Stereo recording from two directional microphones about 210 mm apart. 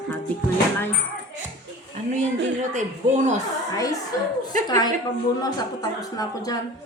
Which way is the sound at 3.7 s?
15° left (ahead or behind).